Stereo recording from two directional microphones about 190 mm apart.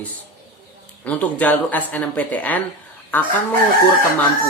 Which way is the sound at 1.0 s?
5° left (ahead or behind).